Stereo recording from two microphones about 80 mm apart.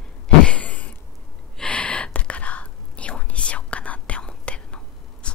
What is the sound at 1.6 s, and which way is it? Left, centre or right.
Whispering, centre.